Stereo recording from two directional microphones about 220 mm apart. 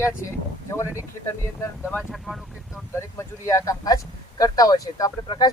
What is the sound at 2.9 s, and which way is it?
Speech, 15° left (ahead or behind).